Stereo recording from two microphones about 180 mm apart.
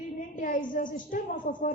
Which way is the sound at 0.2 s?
50° left (ahead or behind).